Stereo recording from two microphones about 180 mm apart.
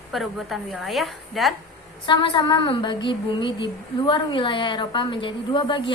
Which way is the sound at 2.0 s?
25° left (ahead or behind).